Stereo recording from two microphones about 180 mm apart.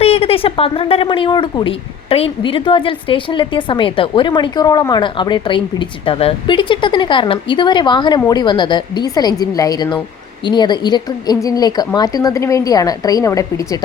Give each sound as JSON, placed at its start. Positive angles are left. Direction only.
{"t": 0.0, "sound": "a woman's voice", "side_deg": 35}